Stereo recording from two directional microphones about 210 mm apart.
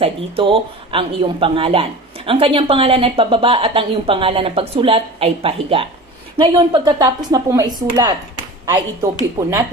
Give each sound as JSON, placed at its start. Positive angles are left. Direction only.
{"t": 0.0, "sound": "speech", "side_deg": -25}